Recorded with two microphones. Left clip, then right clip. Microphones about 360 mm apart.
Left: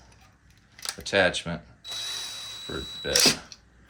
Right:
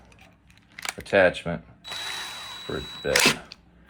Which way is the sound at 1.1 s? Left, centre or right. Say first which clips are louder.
Right 3 dB; centre.